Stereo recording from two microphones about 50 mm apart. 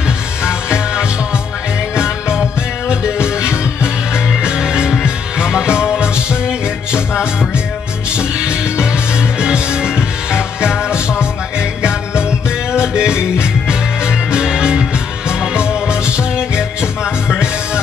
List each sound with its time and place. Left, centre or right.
0.4 s music: centre
4.4 s music: centre
8.2 s music: centre
12.8 s music: centre